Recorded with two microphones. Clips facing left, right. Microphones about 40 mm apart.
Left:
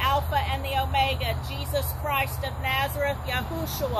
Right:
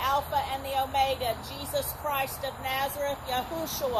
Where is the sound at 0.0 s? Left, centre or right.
Left.